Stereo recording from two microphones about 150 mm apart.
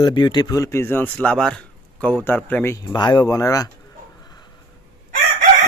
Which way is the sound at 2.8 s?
30° left (ahead or behind).